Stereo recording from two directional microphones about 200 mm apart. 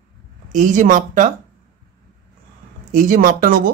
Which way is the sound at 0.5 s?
40° right (ahead or behind).